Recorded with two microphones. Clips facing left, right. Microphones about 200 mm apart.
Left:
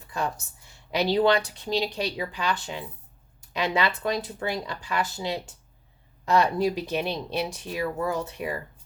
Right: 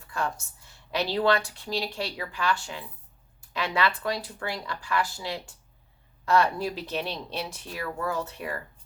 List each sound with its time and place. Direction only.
0.1 s a woman's voice: 20° left (ahead or behind)